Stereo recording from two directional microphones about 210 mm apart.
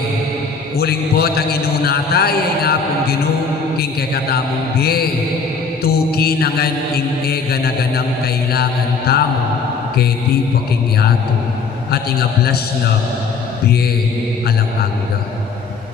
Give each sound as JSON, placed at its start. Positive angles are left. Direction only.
{"t": 0.8, "sound": "a man's voice", "side_deg": 50}
{"t": 9.1, "sound": "a man's voice", "side_deg": 50}